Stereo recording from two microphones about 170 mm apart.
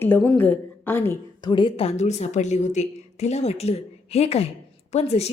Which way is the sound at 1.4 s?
25° left (ahead or behind).